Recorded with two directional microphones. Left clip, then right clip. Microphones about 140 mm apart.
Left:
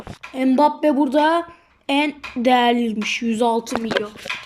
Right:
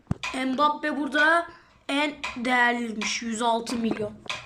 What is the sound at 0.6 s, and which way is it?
Speech, 60° left (ahead or behind).